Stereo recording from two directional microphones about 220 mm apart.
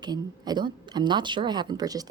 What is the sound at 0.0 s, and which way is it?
Speech, 20° right (ahead or behind).